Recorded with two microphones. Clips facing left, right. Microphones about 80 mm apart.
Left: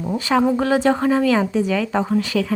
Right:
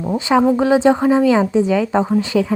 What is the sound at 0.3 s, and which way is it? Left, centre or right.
Speech, centre.